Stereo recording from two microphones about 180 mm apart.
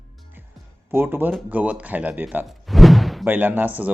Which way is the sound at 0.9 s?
10° right (ahead or behind).